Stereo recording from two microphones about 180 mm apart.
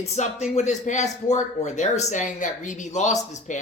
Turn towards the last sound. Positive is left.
turn(degrees=45)  # may be behind; listen again after turning